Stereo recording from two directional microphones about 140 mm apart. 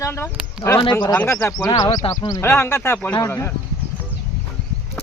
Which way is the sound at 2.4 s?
15° left (ahead or behind).